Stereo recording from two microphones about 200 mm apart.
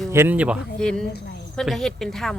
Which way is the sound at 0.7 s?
5° left (ahead or behind).